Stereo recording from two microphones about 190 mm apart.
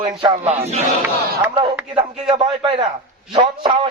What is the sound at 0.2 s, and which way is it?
Speech, 30° right (ahead or behind).